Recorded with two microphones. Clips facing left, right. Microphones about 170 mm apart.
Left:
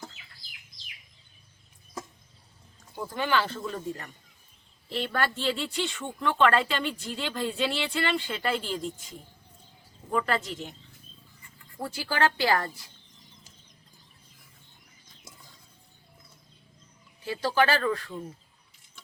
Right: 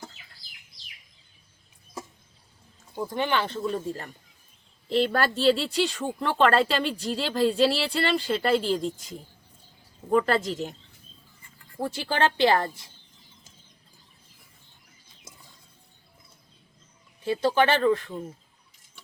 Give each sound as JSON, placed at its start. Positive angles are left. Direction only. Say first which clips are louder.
{"t": 2.9, "sound": "speech", "louder": "right 1 dB", "side_deg": -20}
{"t": 10.1, "sound": "speech", "louder": "right 6 dB", "side_deg": -35}
{"t": 11.8, "sound": "speech", "louder": "right 2 dB", "side_deg": -25}
{"t": 17.2, "sound": "speech", "louder": "right 3 dB", "side_deg": -25}